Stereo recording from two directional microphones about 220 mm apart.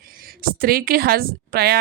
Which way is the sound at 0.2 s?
40° right (ahead or behind).